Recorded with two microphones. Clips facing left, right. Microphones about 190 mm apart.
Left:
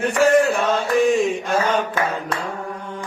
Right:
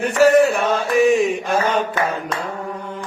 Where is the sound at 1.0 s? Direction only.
Centre (ahead or behind).